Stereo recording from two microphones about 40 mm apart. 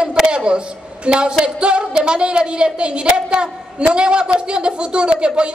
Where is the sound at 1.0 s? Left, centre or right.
Right.